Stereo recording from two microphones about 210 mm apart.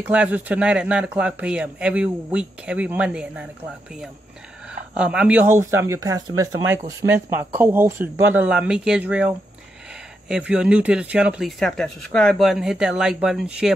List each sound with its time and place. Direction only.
0.1 s speech: 5° right (ahead or behind)
4.9 s speech: 5° right (ahead or behind)